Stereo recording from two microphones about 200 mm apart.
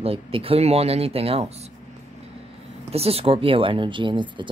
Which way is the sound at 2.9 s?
30° right (ahead or behind).